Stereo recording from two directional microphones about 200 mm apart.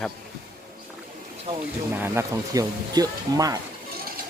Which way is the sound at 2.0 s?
15° right (ahead or behind).